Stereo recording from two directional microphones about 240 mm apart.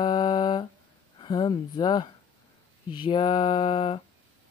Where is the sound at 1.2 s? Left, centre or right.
Centre.